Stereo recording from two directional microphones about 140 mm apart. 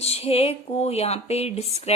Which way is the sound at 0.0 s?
45° left (ahead or behind).